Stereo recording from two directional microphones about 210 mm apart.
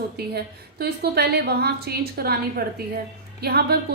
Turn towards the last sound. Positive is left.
turn(degrees=-50)  # may be behind; listen again after turning